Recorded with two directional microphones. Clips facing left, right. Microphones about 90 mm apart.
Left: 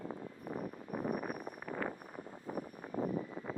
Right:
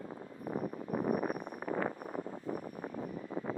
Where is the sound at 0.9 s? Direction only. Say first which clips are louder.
Right 5 dB; 45° right (ahead or behind).